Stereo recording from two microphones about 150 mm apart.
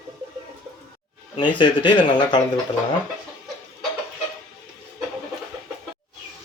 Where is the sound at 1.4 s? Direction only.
30° left (ahead or behind).